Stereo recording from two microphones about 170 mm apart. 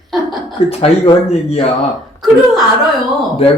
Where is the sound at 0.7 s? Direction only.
35° left (ahead or behind).